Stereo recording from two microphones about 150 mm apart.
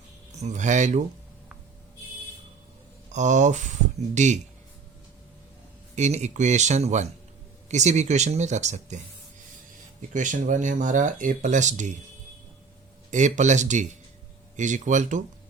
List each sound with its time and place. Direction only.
0.3 s speech: 50° right (ahead or behind)
3.1 s speech: 55° right (ahead or behind)
5.9 s speech: 50° right (ahead or behind)
10.1 s speech: 55° right (ahead or behind)
13.1 s speech: 55° right (ahead or behind)